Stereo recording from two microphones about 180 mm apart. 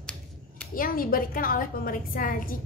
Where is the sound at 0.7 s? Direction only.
50° left (ahead or behind).